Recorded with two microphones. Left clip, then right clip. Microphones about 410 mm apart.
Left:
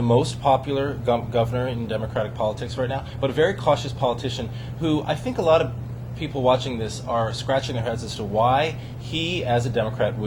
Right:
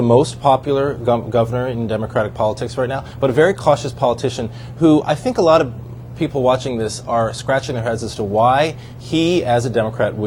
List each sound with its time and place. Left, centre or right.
0.0 s speech: right